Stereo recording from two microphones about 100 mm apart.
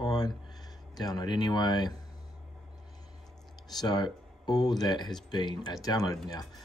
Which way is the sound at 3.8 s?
45° left (ahead or behind).